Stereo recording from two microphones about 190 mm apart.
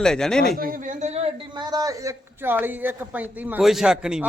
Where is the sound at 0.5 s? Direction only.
50° right (ahead or behind).